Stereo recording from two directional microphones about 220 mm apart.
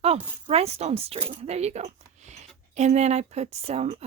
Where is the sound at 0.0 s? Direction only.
25° right (ahead or behind).